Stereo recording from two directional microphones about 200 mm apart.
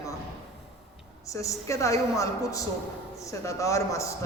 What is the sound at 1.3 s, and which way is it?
A man's voice, 15° left (ahead or behind).